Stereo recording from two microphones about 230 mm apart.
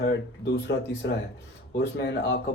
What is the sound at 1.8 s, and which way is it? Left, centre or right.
Speech, left.